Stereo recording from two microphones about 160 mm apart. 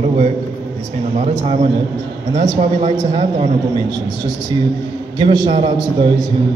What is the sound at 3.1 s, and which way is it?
Speech, 40° right (ahead or behind).